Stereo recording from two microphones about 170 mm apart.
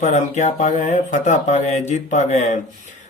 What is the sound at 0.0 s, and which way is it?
Speech, 45° left (ahead or behind).